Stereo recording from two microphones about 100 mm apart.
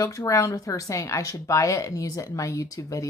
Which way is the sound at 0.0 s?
30° left (ahead or behind).